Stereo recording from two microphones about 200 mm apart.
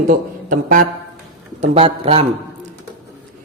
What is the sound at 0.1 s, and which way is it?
Speech, 45° right (ahead or behind).